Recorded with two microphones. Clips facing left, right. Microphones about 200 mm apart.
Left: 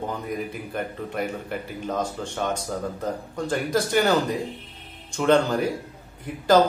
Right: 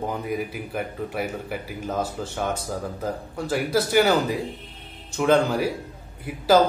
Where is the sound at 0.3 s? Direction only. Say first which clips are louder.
Right 2 dB; 5° right (ahead or behind).